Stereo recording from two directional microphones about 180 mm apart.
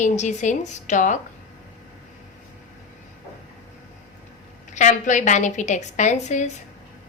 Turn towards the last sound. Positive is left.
turn(degrees=40)  # may be behind; listen again after turning